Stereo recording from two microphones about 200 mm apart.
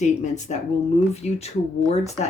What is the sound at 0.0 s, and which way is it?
Speech, 35° left (ahead or behind).